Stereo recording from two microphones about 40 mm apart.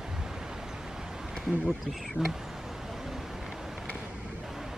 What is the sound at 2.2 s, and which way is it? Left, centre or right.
Speech, right.